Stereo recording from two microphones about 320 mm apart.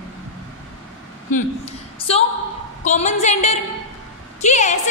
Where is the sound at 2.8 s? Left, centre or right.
Left.